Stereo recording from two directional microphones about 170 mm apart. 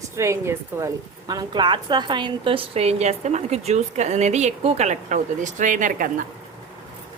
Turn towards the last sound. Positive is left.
turn(degrees=-55)  # may be behind; listen again after turning